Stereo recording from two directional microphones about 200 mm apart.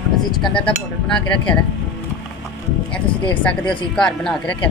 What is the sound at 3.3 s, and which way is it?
Speech, 5° left (ahead or behind).